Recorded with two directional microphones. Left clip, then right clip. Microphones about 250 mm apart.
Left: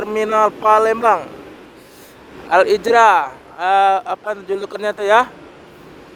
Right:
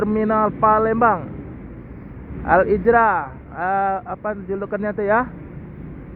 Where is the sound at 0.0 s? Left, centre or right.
Left.